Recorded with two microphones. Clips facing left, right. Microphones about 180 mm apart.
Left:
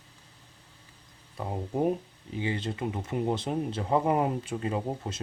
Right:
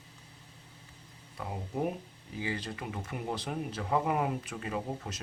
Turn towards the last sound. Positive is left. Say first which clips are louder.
# left 4 dB
turn(degrees=30)  # may be behind; listen again after turning